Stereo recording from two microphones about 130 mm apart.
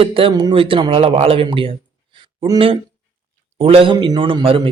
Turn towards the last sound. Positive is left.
turn(degrees=-45)  # may be behind; listen again after turning